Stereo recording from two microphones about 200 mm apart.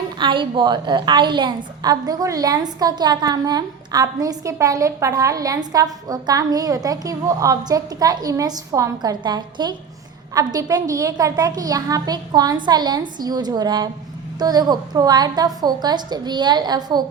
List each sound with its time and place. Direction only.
0.2 s a woman's voice: 25° right (ahead or behind)